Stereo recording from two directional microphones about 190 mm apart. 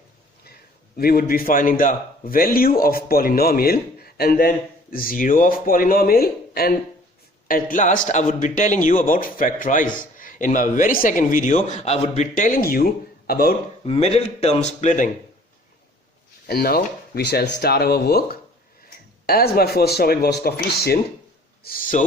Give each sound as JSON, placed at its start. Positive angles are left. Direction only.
{"t": 0.9, "sound": "a man's voice", "side_deg": 50}
{"t": 13.8, "sound": "a man's voice", "side_deg": 30}
{"t": 16.5, "sound": "speech", "side_deg": 55}